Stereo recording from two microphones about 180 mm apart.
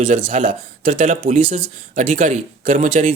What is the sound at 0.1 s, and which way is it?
Speech, 45° right (ahead or behind).